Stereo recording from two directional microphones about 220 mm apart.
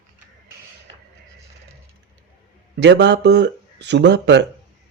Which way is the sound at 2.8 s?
50° right (ahead or behind).